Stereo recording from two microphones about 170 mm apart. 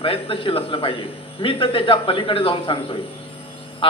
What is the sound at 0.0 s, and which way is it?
A man's voice, 30° left (ahead or behind).